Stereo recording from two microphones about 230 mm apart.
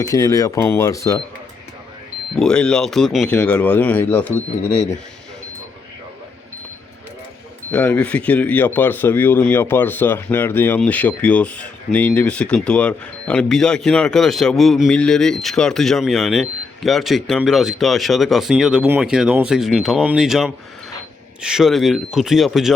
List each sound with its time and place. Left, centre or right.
0.0 s speech: centre
2.3 s speech: centre
7.7 s speech: centre